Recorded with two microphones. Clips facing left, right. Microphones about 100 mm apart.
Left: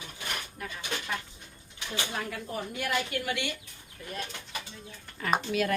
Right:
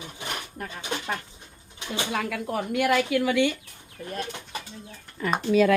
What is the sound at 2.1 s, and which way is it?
Speech, 90° right.